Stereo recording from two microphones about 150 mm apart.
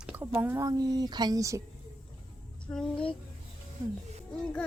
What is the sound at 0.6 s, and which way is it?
Speech, 25° right (ahead or behind).